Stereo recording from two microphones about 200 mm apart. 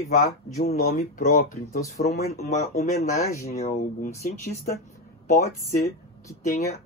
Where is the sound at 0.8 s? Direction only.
45° left (ahead or behind).